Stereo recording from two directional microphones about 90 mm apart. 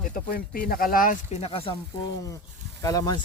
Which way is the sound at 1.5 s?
90° left.